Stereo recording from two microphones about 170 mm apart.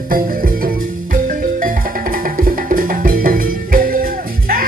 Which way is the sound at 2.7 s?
55° right (ahead or behind).